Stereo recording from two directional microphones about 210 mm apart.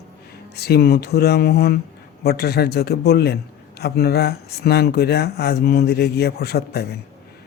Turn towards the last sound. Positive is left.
turn(degrees=50)  # may be behind; listen again after turning